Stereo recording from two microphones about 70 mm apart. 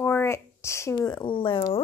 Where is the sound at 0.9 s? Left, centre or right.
Left.